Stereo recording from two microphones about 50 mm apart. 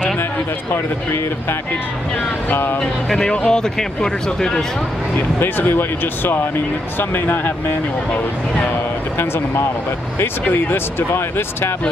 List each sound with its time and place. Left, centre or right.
2.5 s speech: left
2.8 s speech: centre
5.4 s speech: left
9.2 s speech: left